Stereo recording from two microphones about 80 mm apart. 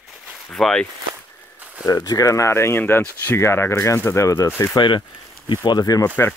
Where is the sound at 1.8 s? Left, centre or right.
Left.